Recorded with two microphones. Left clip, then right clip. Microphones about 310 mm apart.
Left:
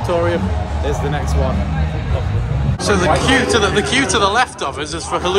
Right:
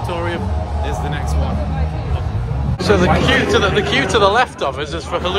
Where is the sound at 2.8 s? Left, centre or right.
Centre.